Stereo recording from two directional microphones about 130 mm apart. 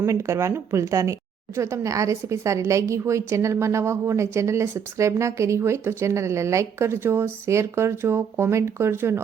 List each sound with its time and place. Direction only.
0.0 s a woman's voice: 20° right (ahead or behind)